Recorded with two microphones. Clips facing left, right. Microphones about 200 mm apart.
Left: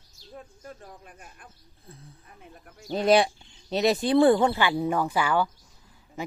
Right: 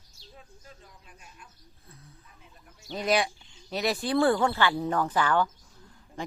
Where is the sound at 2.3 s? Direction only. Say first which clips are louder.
Left 7 dB; 60° left (ahead or behind).